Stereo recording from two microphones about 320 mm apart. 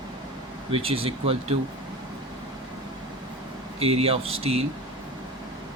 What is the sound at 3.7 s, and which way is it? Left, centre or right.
Speech, centre.